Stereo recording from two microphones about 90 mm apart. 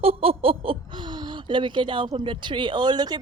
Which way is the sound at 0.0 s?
90° right.